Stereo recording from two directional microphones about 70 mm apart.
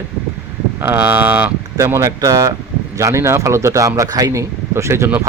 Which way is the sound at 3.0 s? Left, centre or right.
Right.